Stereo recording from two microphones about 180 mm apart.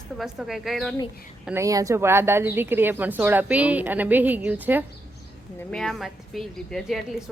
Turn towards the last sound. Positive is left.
turn(degrees=0)  # may be behind; listen again after turning